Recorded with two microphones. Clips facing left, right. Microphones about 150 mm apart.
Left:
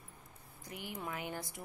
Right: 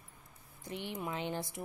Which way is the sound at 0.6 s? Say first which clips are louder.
Right 4 dB; 25° right (ahead or behind).